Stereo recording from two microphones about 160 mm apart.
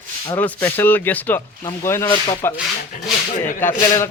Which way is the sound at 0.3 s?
15° left (ahead or behind).